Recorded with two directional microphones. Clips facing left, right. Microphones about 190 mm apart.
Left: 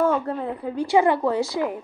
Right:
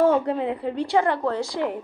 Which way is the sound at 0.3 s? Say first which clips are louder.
Right 3 dB; 20° right (ahead or behind).